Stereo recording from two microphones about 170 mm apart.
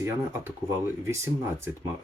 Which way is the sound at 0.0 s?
15° right (ahead or behind).